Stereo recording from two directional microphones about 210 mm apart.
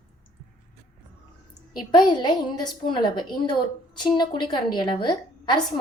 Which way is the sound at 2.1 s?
20° left (ahead or behind).